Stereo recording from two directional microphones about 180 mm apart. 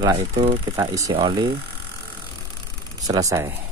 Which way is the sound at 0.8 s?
20° right (ahead or behind).